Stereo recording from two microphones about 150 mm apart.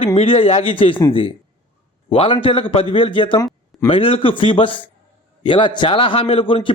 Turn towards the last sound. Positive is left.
turn(degrees=35)  # may be behind; listen again after turning